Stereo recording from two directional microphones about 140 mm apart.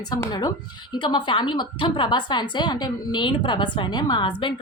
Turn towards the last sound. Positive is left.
turn(degrees=35)  # may be behind; listen again after turning